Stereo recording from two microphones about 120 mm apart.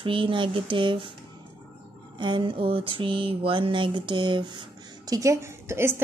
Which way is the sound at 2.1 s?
40° right (ahead or behind).